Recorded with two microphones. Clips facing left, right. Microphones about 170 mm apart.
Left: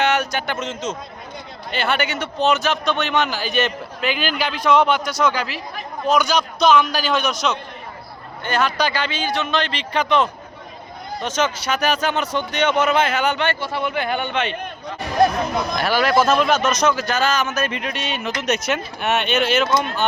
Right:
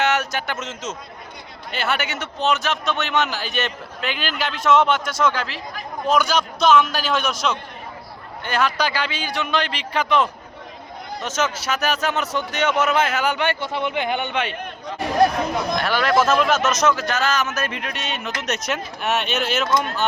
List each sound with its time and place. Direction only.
0.0 s speech: 5° right (ahead or behind); by 14.4 s 20° right (ahead or behind)
15.7 s speech: 5° left (ahead or behind)